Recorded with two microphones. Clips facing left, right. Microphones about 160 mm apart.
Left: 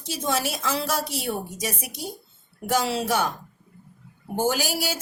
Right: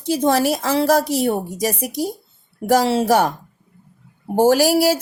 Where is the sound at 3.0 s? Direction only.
65° right (ahead or behind).